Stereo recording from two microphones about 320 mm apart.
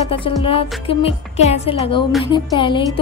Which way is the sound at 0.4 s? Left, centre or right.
Centre.